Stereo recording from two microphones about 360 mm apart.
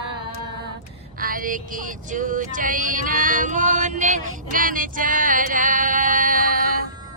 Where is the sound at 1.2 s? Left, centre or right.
Right.